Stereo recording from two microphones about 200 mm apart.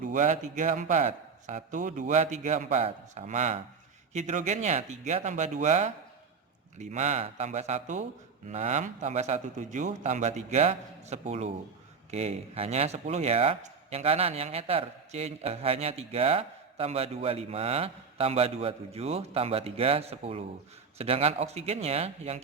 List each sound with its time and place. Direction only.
0.0 s a man's voice: 40° right (ahead or behind)